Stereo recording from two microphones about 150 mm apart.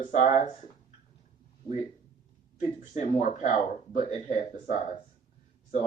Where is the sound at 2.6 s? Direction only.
55° left (ahead or behind).